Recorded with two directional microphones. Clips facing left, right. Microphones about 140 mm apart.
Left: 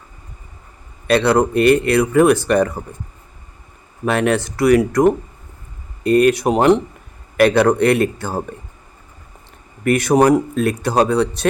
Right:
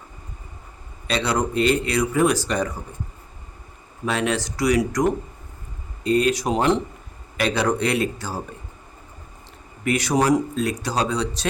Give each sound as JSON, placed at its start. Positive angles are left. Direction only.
{"t": 1.0, "sound": "speech", "side_deg": 60}
{"t": 4.0, "sound": "speech", "side_deg": 55}
{"t": 9.8, "sound": "speech", "side_deg": 55}